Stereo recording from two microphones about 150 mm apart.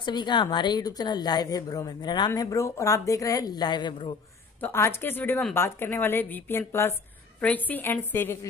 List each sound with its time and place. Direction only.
0.0 s a woman's voice: 30° left (ahead or behind)
4.6 s a woman's voice: 15° left (ahead or behind)